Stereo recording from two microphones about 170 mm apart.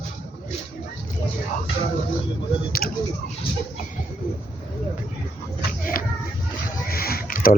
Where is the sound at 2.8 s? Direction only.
60° left (ahead or behind).